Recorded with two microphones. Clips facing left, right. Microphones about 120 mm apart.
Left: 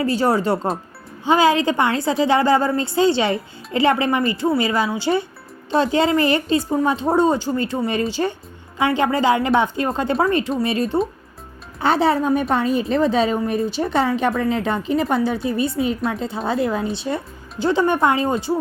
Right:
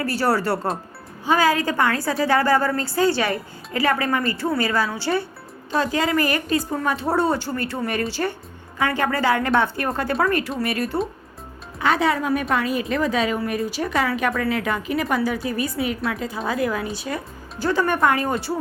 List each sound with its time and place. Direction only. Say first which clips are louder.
0.0 s a woman's voice: left 3 dB; 20° left (ahead or behind)